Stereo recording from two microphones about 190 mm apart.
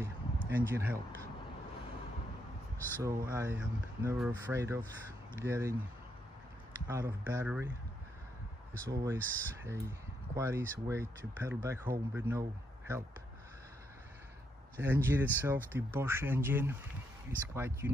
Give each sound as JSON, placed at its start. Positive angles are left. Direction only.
{"t": 0.0, "sound": "a sound", "side_deg": -10}
{"t": 3.0, "sound": "speech", "side_deg": -15}
{"t": 6.9, "sound": "speech", "side_deg": -15}
{"t": 8.8, "sound": "speech", "side_deg": -15}
{"t": 9.2, "sound": "speech", "side_deg": 10}
{"t": 9.6, "sound": "speech", "side_deg": -15}
{"t": 14.8, "sound": "speech", "side_deg": -10}